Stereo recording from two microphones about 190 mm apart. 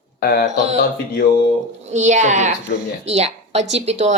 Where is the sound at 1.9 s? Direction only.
40° right (ahead or behind).